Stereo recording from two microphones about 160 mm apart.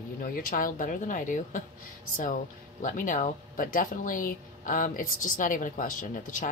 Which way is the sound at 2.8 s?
55° left (ahead or behind).